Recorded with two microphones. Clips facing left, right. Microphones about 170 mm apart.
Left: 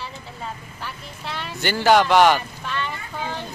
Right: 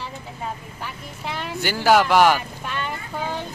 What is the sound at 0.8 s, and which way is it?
Speech, 15° right (ahead or behind).